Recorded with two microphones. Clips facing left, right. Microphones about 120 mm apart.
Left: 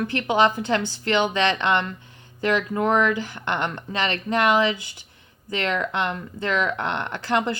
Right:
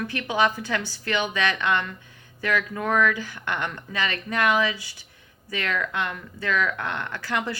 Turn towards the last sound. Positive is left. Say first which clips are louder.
# left 5 dB
turn(degrees=25)  # may be behind; listen again after turning